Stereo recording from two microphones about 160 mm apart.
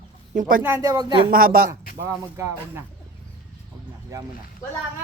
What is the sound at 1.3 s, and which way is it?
Speech, 65° right (ahead or behind).